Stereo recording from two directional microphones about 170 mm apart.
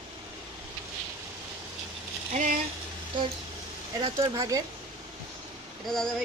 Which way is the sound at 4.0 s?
20° right (ahead or behind).